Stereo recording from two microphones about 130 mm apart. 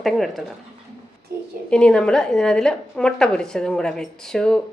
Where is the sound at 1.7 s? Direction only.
5° left (ahead or behind).